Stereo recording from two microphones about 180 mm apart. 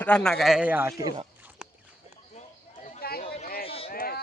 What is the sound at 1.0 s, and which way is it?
Speech, 25° right (ahead or behind).